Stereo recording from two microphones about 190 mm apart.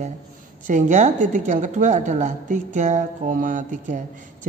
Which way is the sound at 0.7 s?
40° right (ahead or behind).